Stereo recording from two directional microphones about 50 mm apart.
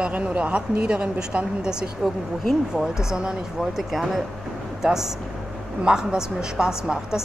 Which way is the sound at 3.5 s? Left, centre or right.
Centre.